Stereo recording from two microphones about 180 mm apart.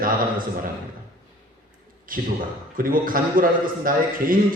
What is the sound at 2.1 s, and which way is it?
A man's voice, 50° right (ahead or behind).